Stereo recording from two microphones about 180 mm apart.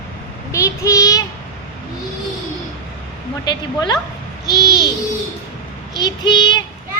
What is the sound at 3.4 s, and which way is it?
Child singing, 25° left (ahead or behind).